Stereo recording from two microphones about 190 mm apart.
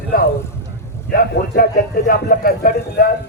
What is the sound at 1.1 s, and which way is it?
A man's voice, 50° left (ahead or behind).